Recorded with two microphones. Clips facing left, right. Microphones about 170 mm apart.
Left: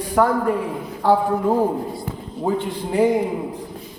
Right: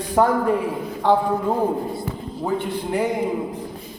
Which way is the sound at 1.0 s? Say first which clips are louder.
Left 1 dB; 5° left (ahead or behind).